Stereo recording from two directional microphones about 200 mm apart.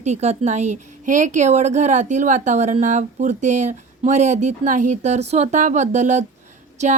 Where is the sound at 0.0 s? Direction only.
35° right (ahead or behind).